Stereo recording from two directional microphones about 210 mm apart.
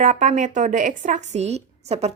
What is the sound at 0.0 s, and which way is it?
A woman's voice, 35° right (ahead or behind).